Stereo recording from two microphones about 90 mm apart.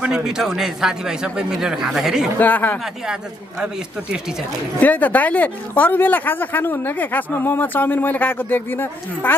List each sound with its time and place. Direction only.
0.0 s a man's voice: 5° right (ahead or behind)
2.3 s speech: 20° left (ahead or behind)
2.8 s a man's voice: 10° right (ahead or behind)
4.7 s speech: 20° left (ahead or behind)